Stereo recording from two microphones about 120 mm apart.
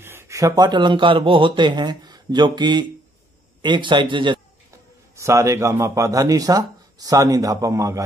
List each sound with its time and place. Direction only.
0.0 s a man's voice: 20° right (ahead or behind); by 4.4 s 40° right (ahead or behind)
5.1 s a man's voice: 25° right (ahead or behind)